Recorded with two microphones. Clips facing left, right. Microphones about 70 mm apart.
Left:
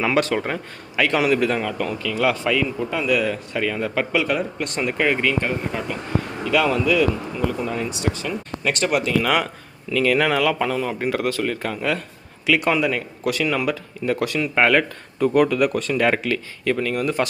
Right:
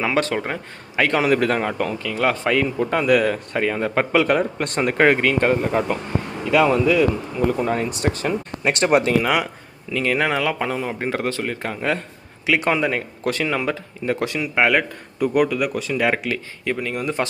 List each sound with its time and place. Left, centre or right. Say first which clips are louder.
0.3 s speech: left 1 dB; centre
0.9 s speech: right 1 dB; right
1.8 s speech: even; right
3.6 s speech: right 2 dB; right
6.4 s speech: right 3 dB; right
7.4 s speech: right 4 dB; right
8.3 s speech: right 2 dB; right
9.2 s speech: even; centre
9.9 s speech: left 2 dB; right
14.4 s speech: left 1 dB; centre
16.3 s speech: left 2 dB; centre